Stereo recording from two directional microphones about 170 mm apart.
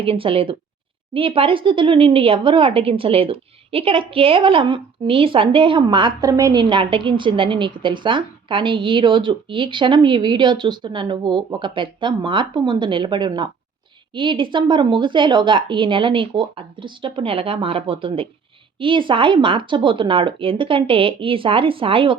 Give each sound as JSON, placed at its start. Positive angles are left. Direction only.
{"t": 0.0, "sound": "a woman's voice", "side_deg": -30}